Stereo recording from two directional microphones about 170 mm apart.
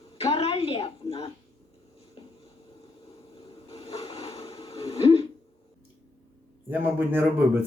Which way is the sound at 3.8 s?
35° left (ahead or behind).